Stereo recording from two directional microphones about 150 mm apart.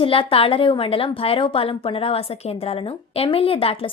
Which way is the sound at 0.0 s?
35° left (ahead or behind).